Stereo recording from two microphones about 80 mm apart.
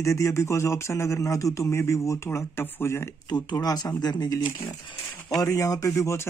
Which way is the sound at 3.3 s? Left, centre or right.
Left.